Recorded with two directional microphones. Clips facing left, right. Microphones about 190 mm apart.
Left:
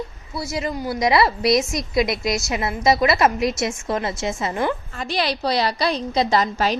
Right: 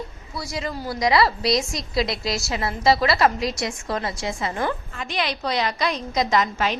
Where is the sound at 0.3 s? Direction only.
25° left (ahead or behind).